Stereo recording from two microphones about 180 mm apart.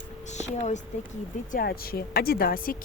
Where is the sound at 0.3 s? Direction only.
40° left (ahead or behind).